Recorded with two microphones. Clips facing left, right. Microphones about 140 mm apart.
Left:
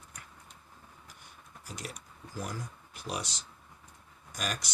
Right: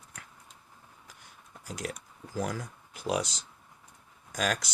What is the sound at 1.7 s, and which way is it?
Speech, 90° right.